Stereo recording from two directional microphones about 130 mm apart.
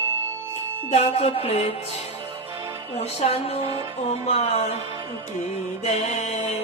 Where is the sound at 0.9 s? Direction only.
50° left (ahead or behind).